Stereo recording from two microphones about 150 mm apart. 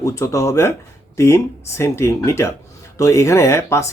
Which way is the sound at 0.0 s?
20° left (ahead or behind).